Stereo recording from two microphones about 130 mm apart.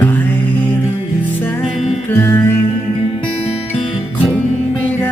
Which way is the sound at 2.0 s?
20° left (ahead or behind).